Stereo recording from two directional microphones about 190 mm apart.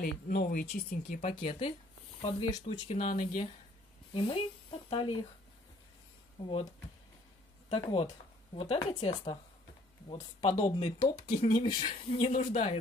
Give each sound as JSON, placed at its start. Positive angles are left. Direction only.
{"t": 0.0, "sound": "speech", "side_deg": 50}
{"t": 1.3, "sound": "speech", "side_deg": 25}
{"t": 4.1, "sound": "speech", "side_deg": 30}
{"t": 6.4, "sound": "speech", "side_deg": 25}
{"t": 7.7, "sound": "speech", "side_deg": 30}
{"t": 10.0, "sound": "speech", "side_deg": 35}
{"t": 10.8, "sound": "speech", "side_deg": 25}
{"t": 12.3, "sound": "speech", "side_deg": 40}